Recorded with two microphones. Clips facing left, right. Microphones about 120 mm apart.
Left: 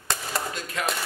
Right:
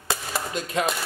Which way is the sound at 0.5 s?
20° right (ahead or behind).